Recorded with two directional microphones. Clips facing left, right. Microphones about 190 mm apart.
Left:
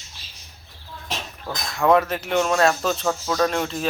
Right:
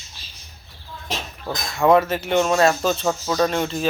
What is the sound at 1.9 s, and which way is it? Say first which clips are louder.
Speech: right 2 dB; 5° right (ahead or behind).